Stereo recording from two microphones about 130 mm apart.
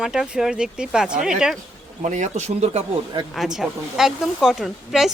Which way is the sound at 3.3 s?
5° right (ahead or behind).